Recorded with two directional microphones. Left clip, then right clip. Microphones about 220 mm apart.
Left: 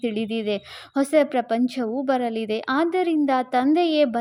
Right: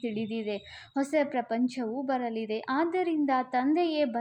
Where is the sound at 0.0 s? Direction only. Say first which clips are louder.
Left 8 dB; 40° left (ahead or behind).